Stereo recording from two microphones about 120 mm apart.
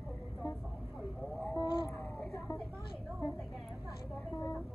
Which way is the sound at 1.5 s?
35° left (ahead or behind).